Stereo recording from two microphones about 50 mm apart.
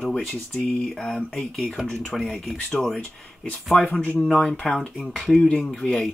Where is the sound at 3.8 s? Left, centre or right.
Left.